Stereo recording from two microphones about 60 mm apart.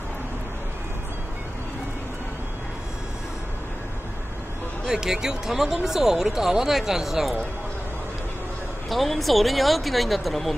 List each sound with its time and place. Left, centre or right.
4.8 s speech: centre
8.8 s speech: centre